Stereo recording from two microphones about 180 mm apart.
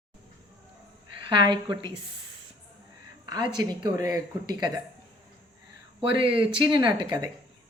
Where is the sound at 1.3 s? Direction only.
25° right (ahead or behind).